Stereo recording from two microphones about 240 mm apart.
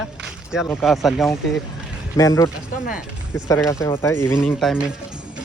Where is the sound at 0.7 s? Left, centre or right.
Centre.